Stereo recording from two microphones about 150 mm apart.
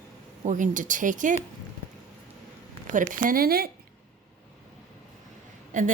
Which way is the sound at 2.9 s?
65° right (ahead or behind).